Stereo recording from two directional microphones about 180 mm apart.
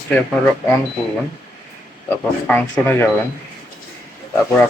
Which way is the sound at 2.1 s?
10° left (ahead or behind).